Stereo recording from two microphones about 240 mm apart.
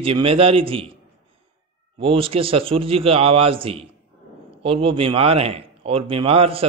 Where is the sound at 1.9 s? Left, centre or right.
Right.